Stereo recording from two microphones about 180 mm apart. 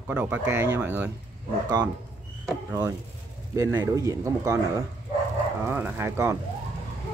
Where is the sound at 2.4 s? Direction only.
20° right (ahead or behind).